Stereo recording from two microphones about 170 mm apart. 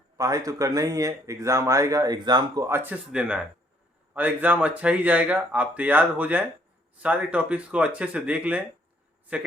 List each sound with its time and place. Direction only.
0.2 s speech: 20° right (ahead or behind)
2.6 s speech: 15° right (ahead or behind)